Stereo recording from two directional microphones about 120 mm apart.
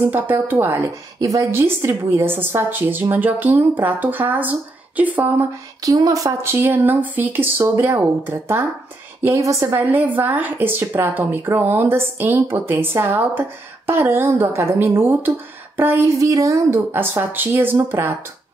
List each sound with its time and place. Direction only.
0.0 s a woman's voice: 15° right (ahead or behind)
5.8 s a woman's voice: 30° right (ahead or behind)